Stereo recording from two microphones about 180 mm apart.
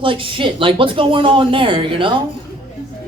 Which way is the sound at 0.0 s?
30° right (ahead or behind).